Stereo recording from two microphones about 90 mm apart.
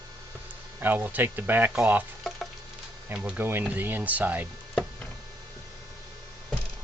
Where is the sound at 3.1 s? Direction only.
15° right (ahead or behind).